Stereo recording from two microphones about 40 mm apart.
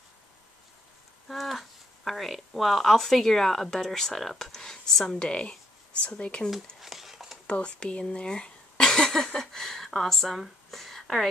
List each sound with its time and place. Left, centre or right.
1.3 s speech: centre
5.2 s speech: left
6.8 s a sound: centre
7.6 s speech: left; by 11.2 s centre